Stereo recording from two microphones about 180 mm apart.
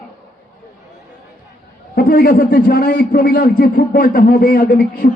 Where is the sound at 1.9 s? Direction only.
55° left (ahead or behind).